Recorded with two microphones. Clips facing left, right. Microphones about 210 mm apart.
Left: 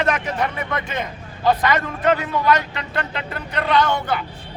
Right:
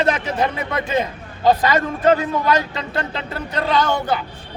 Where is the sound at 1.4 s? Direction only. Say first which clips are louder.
Right 3 dB; 30° right (ahead or behind).